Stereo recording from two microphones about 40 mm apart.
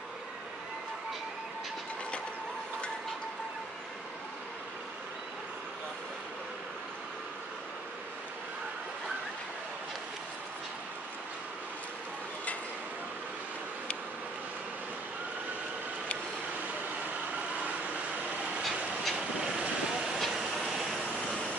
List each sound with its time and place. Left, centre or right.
18.6 s a sound: centre
19.1 s vehicle: right
20.2 s vehicle: centre
20.8 s vehicle: centre